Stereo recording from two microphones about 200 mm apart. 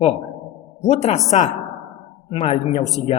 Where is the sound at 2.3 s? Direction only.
30° left (ahead or behind).